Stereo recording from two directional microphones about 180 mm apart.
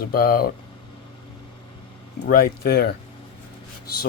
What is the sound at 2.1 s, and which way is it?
Speech, 60° left (ahead or behind).